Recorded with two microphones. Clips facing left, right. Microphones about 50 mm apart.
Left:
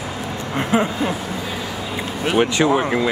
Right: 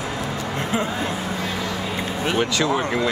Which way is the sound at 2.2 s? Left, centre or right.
Left.